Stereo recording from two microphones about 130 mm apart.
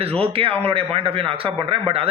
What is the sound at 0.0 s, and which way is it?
Speech, 50° right (ahead or behind).